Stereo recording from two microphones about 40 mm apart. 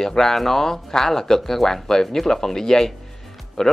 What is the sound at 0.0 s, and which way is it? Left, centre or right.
Speech, centre.